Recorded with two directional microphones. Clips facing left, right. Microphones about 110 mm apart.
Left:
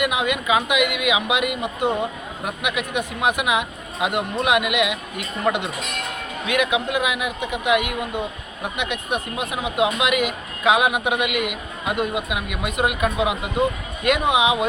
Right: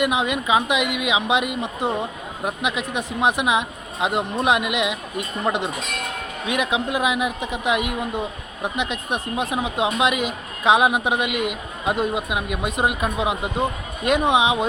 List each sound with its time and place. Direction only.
0.0 s speech: 35° right (ahead or behind)